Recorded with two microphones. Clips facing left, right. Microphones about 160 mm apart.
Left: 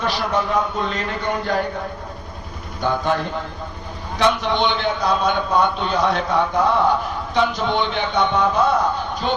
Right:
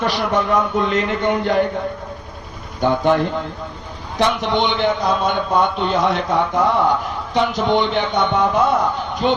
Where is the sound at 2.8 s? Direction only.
20° right (ahead or behind).